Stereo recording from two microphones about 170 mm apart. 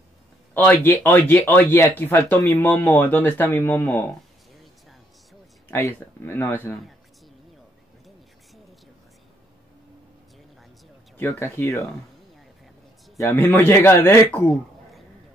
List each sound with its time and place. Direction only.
0.6 s speech: 10° left (ahead or behind)
5.7 s speech: 15° left (ahead or behind)
11.1 s speech: 15° left (ahead or behind)
13.2 s speech: 15° left (ahead or behind)
14.5 s a sound: centre (ahead or behind)